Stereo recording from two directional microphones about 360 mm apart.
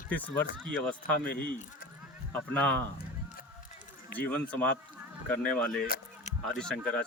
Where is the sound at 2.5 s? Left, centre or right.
Centre.